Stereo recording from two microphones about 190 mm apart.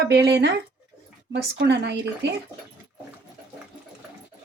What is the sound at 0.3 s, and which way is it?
Speech, 60° right (ahead or behind).